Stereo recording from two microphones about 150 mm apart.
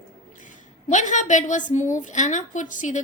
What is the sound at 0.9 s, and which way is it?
A woman's voice, 55° left (ahead or behind).